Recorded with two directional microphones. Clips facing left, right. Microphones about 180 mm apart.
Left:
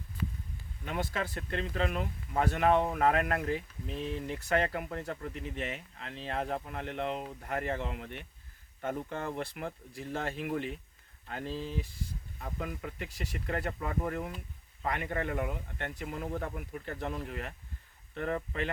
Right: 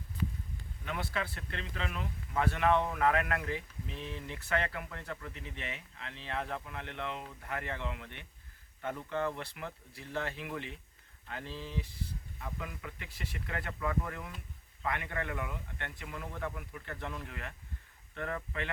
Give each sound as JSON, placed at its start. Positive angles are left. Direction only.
{"t": 0.9, "sound": "speech", "side_deg": 40}